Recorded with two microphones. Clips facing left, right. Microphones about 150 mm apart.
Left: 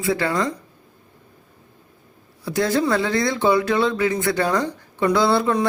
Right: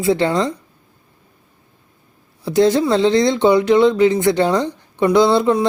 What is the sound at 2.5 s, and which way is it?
Speech, 20° right (ahead or behind).